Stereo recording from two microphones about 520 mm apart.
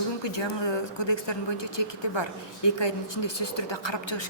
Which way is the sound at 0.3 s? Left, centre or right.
Left.